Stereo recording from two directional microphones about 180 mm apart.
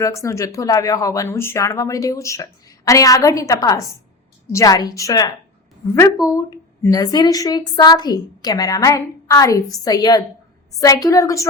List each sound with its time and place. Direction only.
0.0 s speech: 15° left (ahead or behind)